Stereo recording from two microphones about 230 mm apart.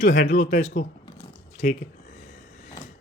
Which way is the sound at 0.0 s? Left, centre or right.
Left.